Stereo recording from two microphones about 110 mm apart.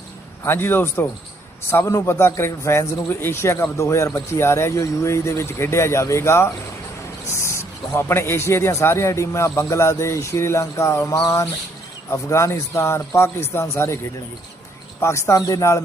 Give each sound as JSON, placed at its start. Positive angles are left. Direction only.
{"t": 0.4, "sound": "a man's voice", "side_deg": 20}
{"t": 11.2, "sound": "a sound", "side_deg": 30}
{"t": 12.1, "sound": "a man's voice", "side_deg": 25}
{"t": 15.0, "sound": "a man's voice", "side_deg": 25}